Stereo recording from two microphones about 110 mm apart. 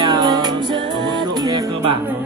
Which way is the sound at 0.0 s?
40° right (ahead or behind).